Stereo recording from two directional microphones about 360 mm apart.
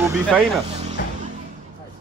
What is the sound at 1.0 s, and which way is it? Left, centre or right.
Music, left.